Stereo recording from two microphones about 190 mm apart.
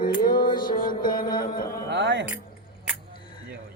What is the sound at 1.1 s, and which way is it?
Music, 50° left (ahead or behind).